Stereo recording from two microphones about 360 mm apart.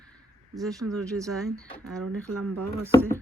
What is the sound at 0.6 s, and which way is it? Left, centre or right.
Speech, centre.